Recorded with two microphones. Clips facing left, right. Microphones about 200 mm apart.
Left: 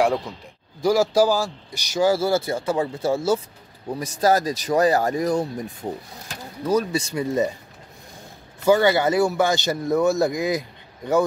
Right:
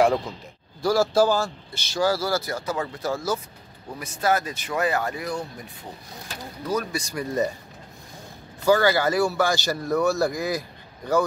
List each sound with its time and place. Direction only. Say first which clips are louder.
0.8 s speech: left 2 dB; 15° left (ahead or behind); by 5.7 s 40° left (ahead or behind)
6.7 s speech: left 6 dB; 30° left (ahead or behind)
8.6 s speech: left 2 dB; 20° left (ahead or behind)